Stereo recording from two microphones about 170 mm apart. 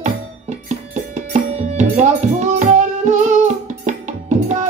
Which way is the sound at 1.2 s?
45° right (ahead or behind).